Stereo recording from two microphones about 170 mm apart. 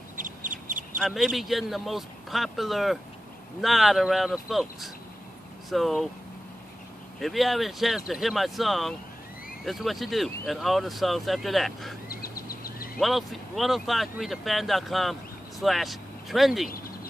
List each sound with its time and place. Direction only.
0.2 s duck: 50° right (ahead or behind)
0.9 s speech: 5° right (ahead or behind)
7.2 s speech: centre (ahead or behind)
12.1 s a sound: 60° left (ahead or behind)
13.0 s speech: centre (ahead or behind)
16.6 s a sound: 60° left (ahead or behind)